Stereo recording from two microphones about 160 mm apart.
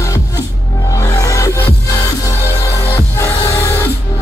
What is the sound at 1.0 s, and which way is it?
Music, 20° left (ahead or behind).